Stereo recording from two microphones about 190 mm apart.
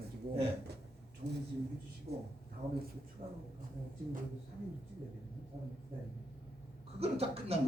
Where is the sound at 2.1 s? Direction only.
35° right (ahead or behind).